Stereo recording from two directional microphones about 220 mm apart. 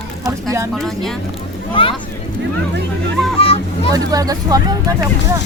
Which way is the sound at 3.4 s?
25° left (ahead or behind).